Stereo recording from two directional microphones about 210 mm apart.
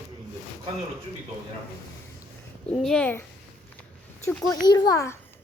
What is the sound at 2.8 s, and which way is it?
Speech, 5° left (ahead or behind).